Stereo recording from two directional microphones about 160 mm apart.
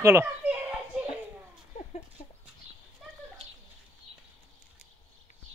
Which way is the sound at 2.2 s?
50° left (ahead or behind).